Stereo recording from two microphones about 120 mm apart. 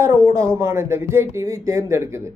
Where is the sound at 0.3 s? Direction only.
25° right (ahead or behind).